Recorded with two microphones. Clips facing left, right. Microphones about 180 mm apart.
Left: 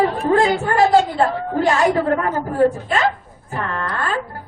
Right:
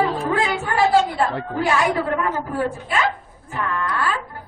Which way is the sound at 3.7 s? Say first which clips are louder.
Right 3 dB; 35° left (ahead or behind).